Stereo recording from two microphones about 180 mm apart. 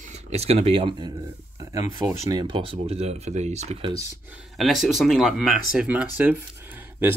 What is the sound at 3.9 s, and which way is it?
Speech, 20° right (ahead or behind).